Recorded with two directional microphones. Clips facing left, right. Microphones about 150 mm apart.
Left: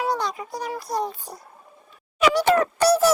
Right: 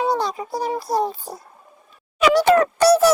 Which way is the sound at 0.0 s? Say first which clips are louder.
Right 4 dB; 30° right (ahead or behind).